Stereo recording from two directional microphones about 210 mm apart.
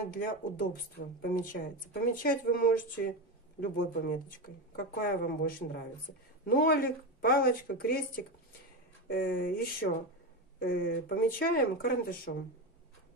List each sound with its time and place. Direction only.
0.1 s speech: 40° left (ahead or behind)
9.0 s speech: 45° left (ahead or behind)